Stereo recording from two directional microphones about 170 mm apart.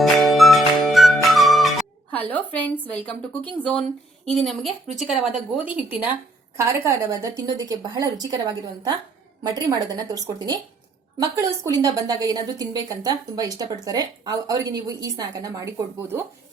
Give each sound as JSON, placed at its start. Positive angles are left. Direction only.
{"t": 0.0, "sound": "music", "side_deg": 0}
{"t": 2.0, "sound": "a woman's voice", "side_deg": 10}